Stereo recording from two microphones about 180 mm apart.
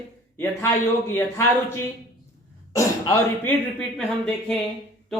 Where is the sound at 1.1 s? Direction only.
15° left (ahead or behind).